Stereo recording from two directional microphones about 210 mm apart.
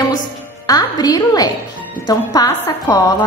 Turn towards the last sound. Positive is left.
turn(degrees=15)  # may be behind; listen again after turning